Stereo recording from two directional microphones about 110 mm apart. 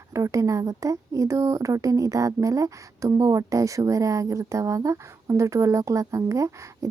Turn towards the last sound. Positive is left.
turn(degrees=-30)  # may be behind; listen again after turning